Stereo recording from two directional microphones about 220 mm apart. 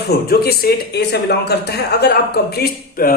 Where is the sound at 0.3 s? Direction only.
45° left (ahead or behind).